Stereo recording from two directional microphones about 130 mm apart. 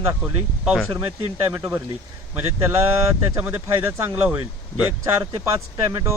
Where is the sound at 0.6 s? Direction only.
Centre (ahead or behind).